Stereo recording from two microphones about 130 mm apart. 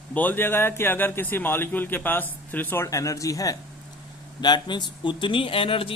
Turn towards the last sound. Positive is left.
turn(degrees=45)  # may be behind; listen again after turning